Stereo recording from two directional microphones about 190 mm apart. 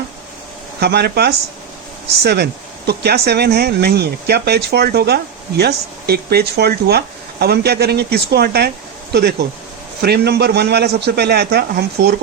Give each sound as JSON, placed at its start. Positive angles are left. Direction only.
{"t": 0.8, "sound": "speech", "side_deg": -60}
{"t": 10.0, "sound": "speech", "side_deg": -60}